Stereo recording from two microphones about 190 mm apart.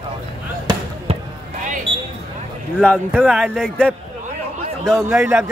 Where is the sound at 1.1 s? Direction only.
30° right (ahead or behind).